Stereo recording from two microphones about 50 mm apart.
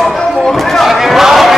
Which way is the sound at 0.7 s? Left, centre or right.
Centre.